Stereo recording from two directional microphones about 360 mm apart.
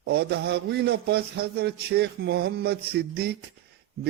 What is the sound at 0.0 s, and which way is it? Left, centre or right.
A man's voice, right.